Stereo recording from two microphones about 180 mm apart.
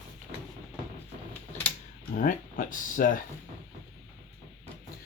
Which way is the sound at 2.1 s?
50° left (ahead or behind).